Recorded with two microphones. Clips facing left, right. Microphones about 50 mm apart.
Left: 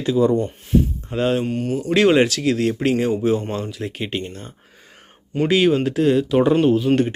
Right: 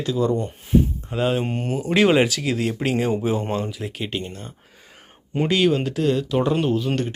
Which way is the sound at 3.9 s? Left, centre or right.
Centre.